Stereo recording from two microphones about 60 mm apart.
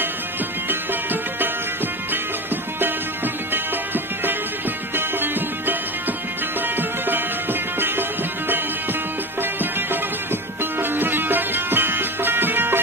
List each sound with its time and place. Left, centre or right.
0.7 s music: right
3.5 s music: right
7.8 s music: right